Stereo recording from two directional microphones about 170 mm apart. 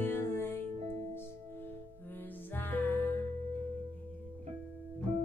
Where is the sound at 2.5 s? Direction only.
10° left (ahead or behind).